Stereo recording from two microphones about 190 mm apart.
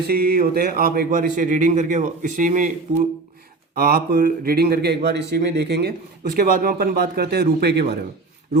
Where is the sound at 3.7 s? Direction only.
55° right (ahead or behind).